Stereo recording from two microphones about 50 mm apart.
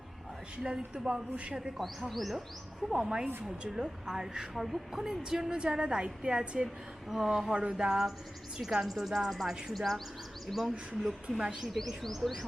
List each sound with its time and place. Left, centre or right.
0.5 s a woman's voice: centre
1.8 s speech: centre
2.9 s a woman's voice: centre
7.1 s a woman's voice: centre
7.5 s a sound: right
7.8 s a woman's voice: centre